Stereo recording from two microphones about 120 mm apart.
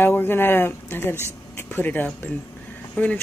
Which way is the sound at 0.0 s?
15° left (ahead or behind).